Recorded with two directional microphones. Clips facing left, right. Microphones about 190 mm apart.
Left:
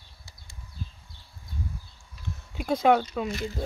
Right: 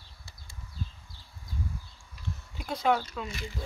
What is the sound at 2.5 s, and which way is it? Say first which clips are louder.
Speech: left 6 dB; 60° left (ahead or behind).